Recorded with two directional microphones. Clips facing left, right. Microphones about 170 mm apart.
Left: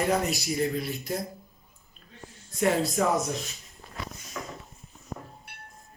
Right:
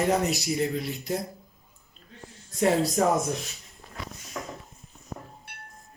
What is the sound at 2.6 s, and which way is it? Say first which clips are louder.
Speech: right 2 dB; 35° right (ahead or behind).